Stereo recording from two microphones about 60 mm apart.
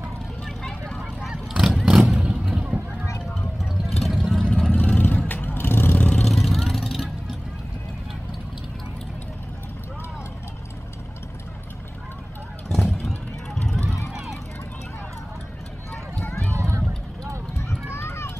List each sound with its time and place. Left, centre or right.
0.5 s vehicle: centre
1.3 s vehicle: centre
3.8 s vehicle: centre
4.7 s vehicle: left
5.9 s vehicle: left
6.2 s vehicle: centre
12.6 s vehicle: centre
16.5 s vehicle: right
17.9 s run: left